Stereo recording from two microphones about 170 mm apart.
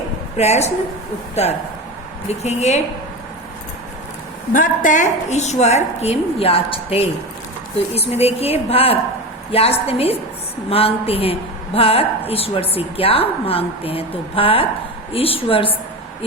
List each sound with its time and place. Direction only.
0.3 s a woman's voice: 40° left (ahead or behind)
4.5 s a woman's voice: 50° left (ahead or behind); by 15.7 s 30° left (ahead or behind)